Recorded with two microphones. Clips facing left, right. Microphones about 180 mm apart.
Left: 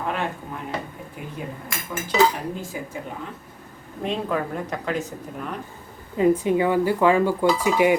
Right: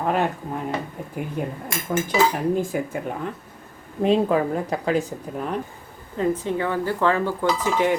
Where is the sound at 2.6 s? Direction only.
55° right (ahead or behind).